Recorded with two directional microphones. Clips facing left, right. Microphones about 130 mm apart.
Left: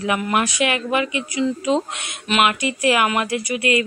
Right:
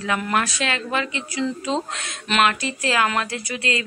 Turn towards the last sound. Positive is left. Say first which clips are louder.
# left 6 dB
turn(degrees=15)  # may be behind; listen again after turning